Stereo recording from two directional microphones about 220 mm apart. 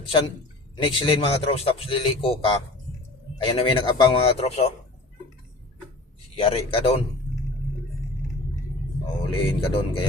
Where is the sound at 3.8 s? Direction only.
20° left (ahead or behind).